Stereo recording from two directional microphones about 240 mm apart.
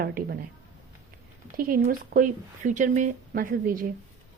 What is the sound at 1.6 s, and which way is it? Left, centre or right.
Speech, right.